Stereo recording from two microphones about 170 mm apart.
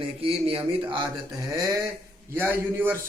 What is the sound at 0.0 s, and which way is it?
Speech, 35° right (ahead or behind).